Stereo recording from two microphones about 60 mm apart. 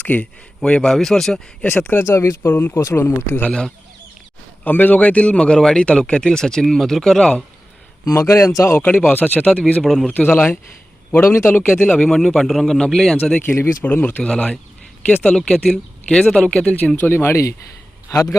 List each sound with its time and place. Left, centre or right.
0.0 s speech: left
0.6 s speech: centre
1.9 s speech: left
2.4 s a man's voice: left
4.6 s speech: left; by 7.4 s centre
8.1 s a man's voice: left
8.8 s speech: left
9.8 s a man's voice: centre
10.1 s a man's voice: left
11.9 s a man's voice: centre
13.4 s speech: left
13.8 s speech: left
17.0 s speech: left